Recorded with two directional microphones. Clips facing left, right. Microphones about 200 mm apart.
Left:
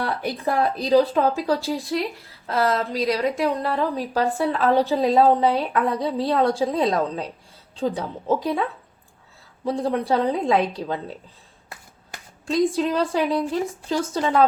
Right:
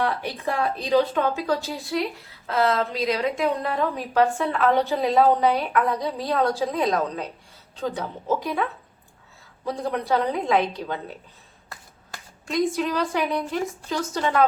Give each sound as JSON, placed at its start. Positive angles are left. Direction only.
{"t": 0.0, "sound": "a woman's voice", "side_deg": 35}
{"t": 9.6, "sound": "a woman's voice", "side_deg": 30}
{"t": 12.5, "sound": "a woman's voice", "side_deg": 30}